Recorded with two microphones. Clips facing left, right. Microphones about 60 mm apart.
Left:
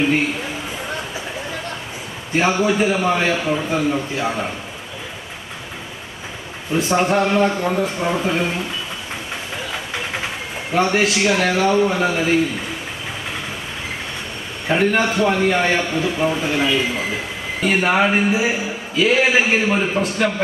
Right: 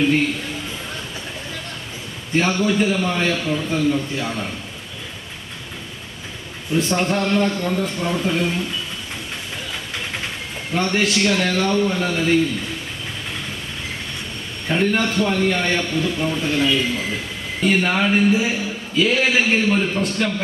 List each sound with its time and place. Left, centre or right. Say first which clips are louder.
0.0 s a man's voice: even; centre
2.3 s a man's voice: left 2 dB; centre
6.7 s a man's voice: left 3 dB; centre
9.7 s speech: left 3 dB; centre
14.7 s a man's voice: left 2 dB; centre